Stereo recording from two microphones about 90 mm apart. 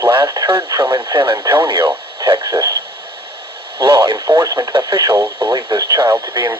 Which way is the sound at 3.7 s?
65° right (ahead or behind).